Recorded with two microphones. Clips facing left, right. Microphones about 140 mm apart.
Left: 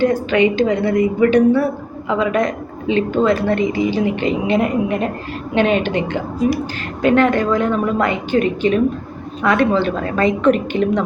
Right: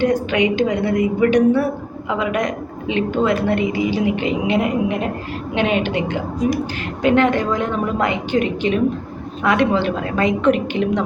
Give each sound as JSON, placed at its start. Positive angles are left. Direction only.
{"t": 0.0, "sound": "a woman's voice", "side_deg": -15}